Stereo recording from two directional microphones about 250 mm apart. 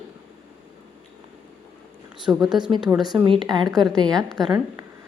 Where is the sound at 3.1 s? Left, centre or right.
Centre.